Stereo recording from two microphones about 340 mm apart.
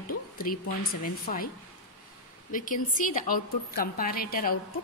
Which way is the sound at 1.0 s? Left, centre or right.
Left.